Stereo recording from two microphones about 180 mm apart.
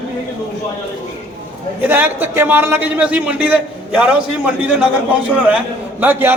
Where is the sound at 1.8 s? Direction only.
10° right (ahead or behind).